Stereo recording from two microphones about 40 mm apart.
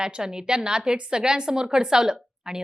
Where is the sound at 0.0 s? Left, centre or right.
Centre.